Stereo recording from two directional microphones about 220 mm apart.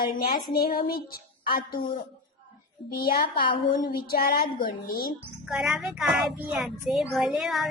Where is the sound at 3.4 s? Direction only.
20° left (ahead or behind).